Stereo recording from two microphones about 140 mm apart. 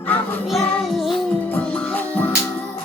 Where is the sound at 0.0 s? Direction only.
15° left (ahead or behind).